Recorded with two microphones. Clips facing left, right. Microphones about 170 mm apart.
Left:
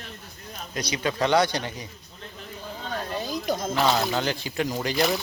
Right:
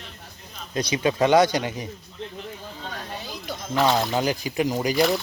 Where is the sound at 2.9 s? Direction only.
45° left (ahead or behind).